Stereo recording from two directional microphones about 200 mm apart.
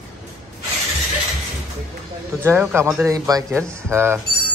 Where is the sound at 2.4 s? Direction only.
10° right (ahead or behind).